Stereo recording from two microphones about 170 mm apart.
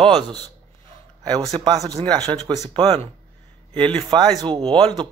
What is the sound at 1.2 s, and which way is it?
Speech, 20° right (ahead or behind).